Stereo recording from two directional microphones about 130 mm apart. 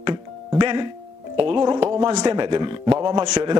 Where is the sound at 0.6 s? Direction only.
40° right (ahead or behind).